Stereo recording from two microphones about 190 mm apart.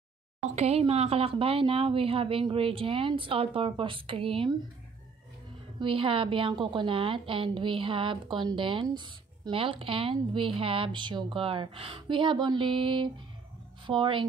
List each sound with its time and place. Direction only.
0.6 s a woman's voice: 30° right (ahead or behind)
5.8 s a woman's voice: 30° right (ahead or behind)